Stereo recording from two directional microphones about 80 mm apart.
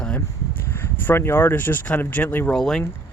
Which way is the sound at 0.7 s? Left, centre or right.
Left.